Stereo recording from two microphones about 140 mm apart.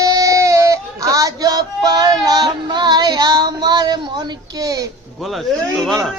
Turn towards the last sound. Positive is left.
turn(degrees=0)  # may be behind; listen again after turning